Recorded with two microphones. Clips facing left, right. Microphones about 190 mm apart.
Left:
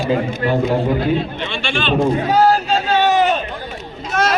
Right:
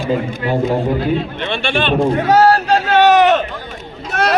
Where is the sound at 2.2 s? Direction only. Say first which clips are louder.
Right 3 dB; 75° right (ahead or behind).